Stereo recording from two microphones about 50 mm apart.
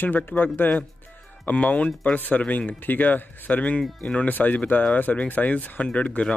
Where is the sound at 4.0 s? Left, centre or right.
Left.